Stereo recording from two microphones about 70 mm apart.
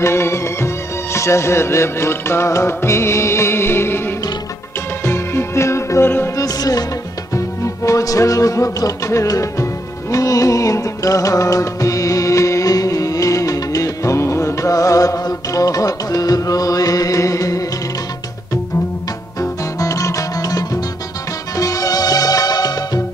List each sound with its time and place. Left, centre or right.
0.0 s music: left
6.3 s music: left
7.3 s music: left
19.4 s music: left